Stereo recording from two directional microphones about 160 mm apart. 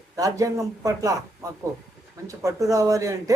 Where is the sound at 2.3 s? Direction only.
20° right (ahead or behind).